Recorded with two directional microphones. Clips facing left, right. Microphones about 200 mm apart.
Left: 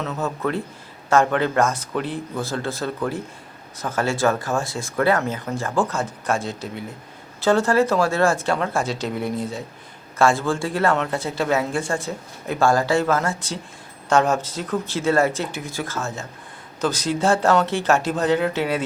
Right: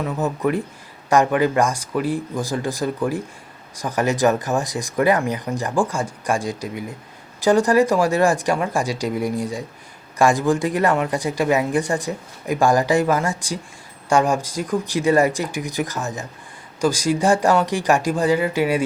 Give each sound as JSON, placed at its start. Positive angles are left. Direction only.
{"t": 0.0, "sound": "speech", "side_deg": -15}